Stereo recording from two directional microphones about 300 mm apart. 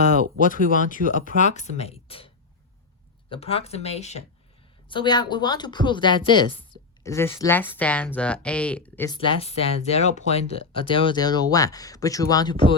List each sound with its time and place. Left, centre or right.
0.3 s speech: left